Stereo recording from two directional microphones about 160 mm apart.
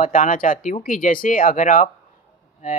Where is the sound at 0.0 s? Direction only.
55° left (ahead or behind).